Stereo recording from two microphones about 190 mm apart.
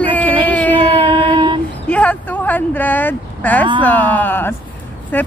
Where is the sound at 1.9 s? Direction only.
5° left (ahead or behind).